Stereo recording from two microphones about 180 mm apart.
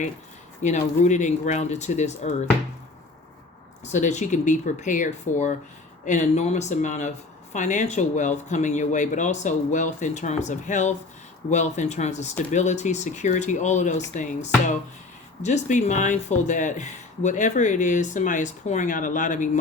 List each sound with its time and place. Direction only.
0.6 s speech: 40° left (ahead or behind)
3.9 s speech: 40° left (ahead or behind)